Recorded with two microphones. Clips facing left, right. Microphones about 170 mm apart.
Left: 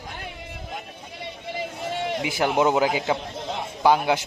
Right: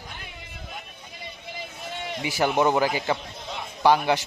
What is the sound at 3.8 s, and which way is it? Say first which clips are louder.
Speech: even; centre (ahead or behind).